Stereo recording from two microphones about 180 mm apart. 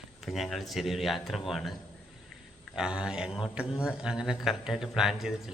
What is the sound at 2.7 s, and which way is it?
Speech, 5° right (ahead or behind).